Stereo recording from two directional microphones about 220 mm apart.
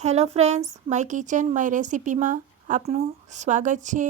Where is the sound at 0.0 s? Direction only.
30° right (ahead or behind).